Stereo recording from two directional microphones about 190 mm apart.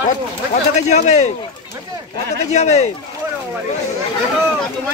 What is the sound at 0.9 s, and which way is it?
Speech, 35° left (ahead or behind).